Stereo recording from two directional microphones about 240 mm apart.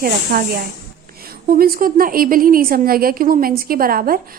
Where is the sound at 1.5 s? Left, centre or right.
Right.